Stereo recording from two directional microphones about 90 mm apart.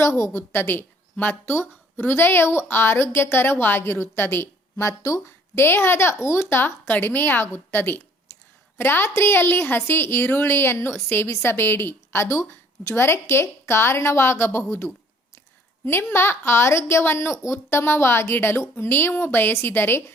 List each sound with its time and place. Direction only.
0.0 s a woman's voice: 30° left (ahead or behind)